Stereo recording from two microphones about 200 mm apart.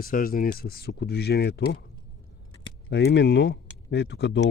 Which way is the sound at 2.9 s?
60° left (ahead or behind).